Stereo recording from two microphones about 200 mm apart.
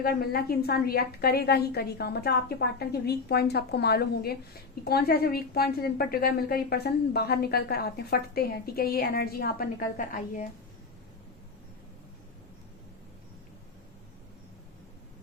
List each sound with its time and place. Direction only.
0.0 s a woman's voice: 50° left (ahead or behind)